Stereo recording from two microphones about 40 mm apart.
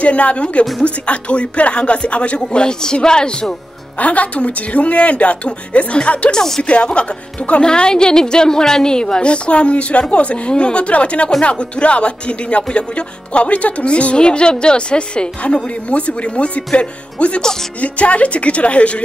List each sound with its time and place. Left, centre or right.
0.0 s speech: left; by 3.5 s centre
4.0 s speech: left
6.3 s speech: centre
6.7 s speech: left